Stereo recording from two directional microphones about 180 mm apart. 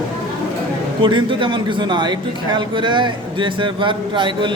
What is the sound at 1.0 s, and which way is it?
A man's voice, 30° right (ahead or behind).